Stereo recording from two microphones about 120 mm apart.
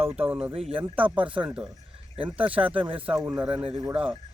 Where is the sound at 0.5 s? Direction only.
50° right (ahead or behind).